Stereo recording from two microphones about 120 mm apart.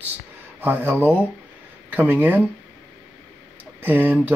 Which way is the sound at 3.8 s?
15° right (ahead or behind).